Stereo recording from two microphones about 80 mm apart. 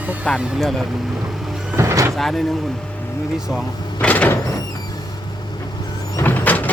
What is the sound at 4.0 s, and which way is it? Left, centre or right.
Sliding door, centre.